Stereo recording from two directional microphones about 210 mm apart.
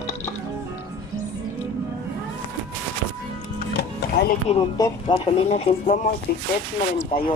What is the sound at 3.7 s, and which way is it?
Music, 50° left (ahead or behind).